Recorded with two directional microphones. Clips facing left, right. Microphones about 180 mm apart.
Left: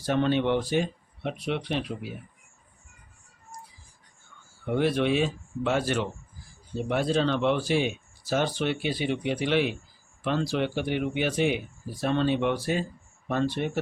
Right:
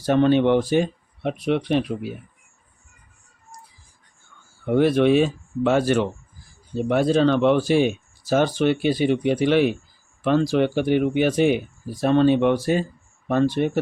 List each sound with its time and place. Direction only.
0.0 s speech: 45° right (ahead or behind)
4.7 s speech: 50° right (ahead or behind)